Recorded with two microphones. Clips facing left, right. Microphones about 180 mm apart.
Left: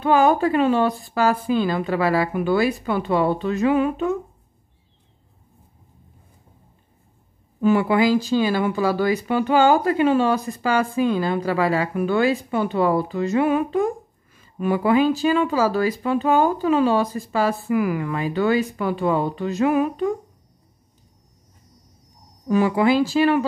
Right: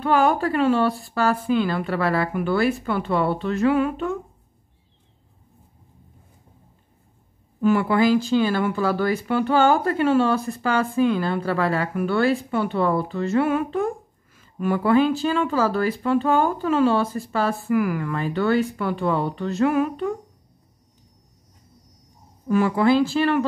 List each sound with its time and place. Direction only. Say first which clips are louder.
0.0 s speech: left 3 dB; 20° left (ahead or behind)
7.6 s speech: left 1 dB; 15° left (ahead or behind)
22.5 s speech: even; 15° left (ahead or behind)